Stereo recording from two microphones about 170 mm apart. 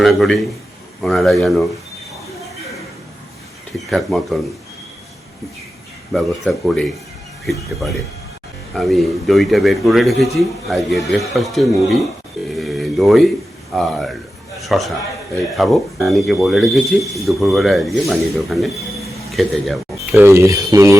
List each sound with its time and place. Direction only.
0.0 s speech: centre (ahead or behind)
3.8 s speech: centre (ahead or behind)
6.1 s speech: centre (ahead or behind)
8.7 s speech: centre (ahead or behind)
20.0 s speech: 15° right (ahead or behind)